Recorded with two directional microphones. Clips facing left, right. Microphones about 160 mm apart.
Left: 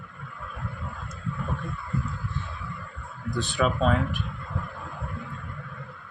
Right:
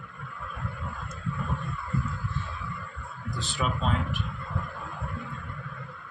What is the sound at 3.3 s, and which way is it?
Speech, 60° left (ahead or behind).